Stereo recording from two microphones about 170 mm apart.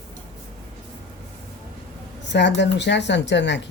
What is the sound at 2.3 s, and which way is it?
Speech, 90° left.